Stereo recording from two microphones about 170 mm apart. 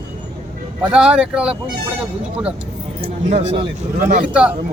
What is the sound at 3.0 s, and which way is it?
Speech, 40° right (ahead or behind).